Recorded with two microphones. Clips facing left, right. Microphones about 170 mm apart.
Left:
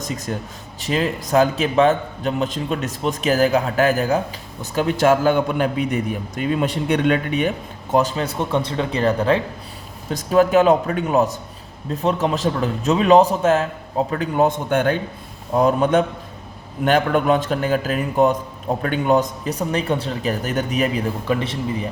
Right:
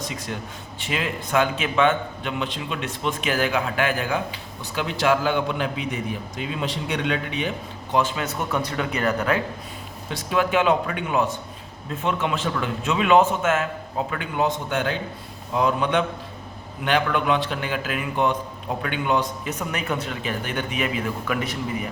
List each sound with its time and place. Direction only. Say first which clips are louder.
0.0 s a man's voice: left 4 dB; 40° left (ahead or behind)
10.1 s a man's voice: left 7 dB; 40° left (ahead or behind)